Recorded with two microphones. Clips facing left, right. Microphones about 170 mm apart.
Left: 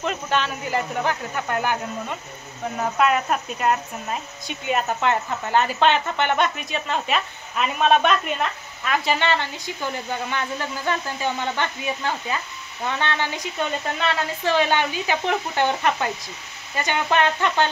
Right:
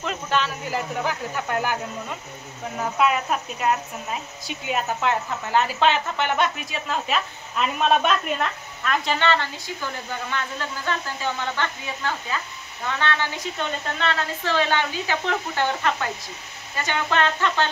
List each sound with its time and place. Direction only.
0.0 s a woman's voice: centre (ahead or behind)